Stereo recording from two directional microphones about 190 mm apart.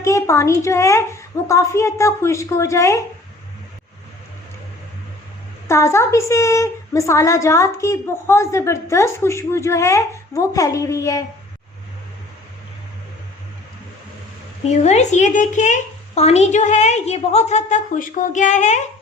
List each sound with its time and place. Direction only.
0.0 s a woman's voice: 15° left (ahead or behind)
5.6 s a woman's voice: 15° left (ahead or behind)
14.6 s speech: 35° left (ahead or behind)